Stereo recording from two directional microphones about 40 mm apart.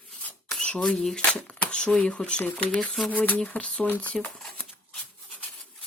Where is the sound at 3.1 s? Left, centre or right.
Left.